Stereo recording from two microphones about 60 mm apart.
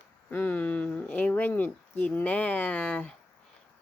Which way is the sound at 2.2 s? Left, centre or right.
Left.